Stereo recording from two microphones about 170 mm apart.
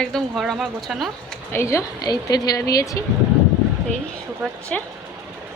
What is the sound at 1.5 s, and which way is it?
Speech, 15° left (ahead or behind).